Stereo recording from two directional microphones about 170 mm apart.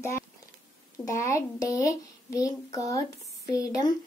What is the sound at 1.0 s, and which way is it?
Speech, 20° left (ahead or behind).